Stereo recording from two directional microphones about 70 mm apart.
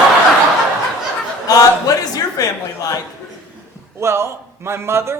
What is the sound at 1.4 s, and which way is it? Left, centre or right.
A man's voice, left.